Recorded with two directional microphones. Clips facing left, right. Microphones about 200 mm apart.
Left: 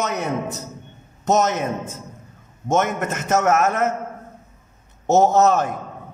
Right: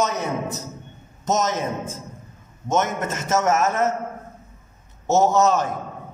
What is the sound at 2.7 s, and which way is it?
A man's voice, 55° left (ahead or behind).